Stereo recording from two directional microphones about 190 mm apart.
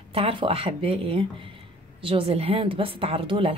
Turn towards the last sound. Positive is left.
turn(degrees=-30)  # may be behind; listen again after turning